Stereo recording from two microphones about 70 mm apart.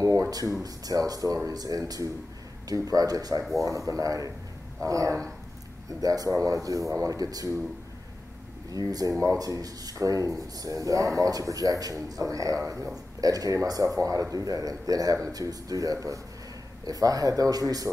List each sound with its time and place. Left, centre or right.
0.0 s speech: right
3.5 s speech: right
8.7 s speech: right